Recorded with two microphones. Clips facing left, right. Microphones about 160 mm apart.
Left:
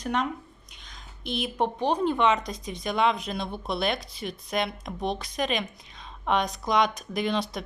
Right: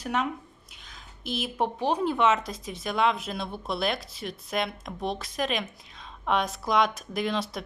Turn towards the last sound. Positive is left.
turn(degrees=0)  # may be behind; listen again after turning